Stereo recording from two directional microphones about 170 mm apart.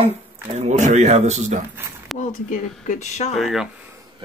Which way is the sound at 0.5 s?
45° right (ahead or behind).